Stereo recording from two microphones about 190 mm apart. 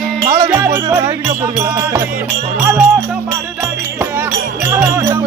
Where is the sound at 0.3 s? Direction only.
15° right (ahead or behind).